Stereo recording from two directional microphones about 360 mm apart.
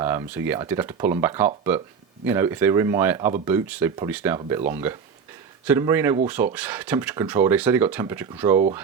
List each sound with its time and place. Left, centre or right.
0.0 s speech: centre